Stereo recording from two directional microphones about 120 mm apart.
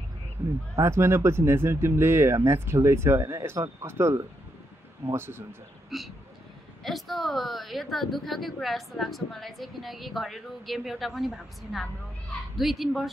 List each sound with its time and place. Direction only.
0.7 s speech: 20° right (ahead or behind)
5.9 s a woman's voice: centre (ahead or behind)